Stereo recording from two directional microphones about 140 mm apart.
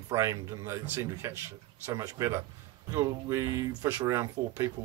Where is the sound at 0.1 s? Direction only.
25° right (ahead or behind).